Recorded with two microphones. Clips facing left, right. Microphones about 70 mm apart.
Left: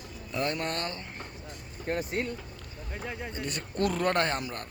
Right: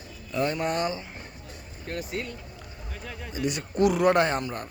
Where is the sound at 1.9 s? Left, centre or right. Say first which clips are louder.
Left 2 dB; left.